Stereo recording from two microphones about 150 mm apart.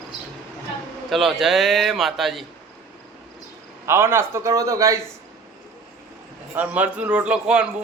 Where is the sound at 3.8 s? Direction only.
15° right (ahead or behind).